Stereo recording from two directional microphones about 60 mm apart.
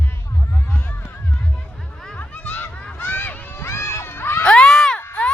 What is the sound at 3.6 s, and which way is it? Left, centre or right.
Crowd, left.